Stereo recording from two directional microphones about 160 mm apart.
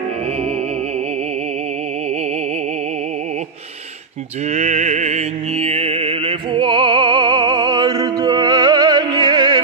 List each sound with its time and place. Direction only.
4.5 s music: 45° right (ahead or behind); by 9.6 s 30° right (ahead or behind)